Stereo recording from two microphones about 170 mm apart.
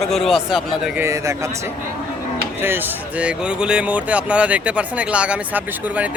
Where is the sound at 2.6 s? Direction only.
10° right (ahead or behind).